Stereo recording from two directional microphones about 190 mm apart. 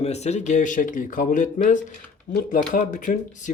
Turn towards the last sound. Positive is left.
turn(degrees=45)  # may be behind; listen again after turning